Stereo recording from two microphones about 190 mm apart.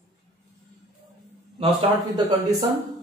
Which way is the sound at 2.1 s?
20° right (ahead or behind).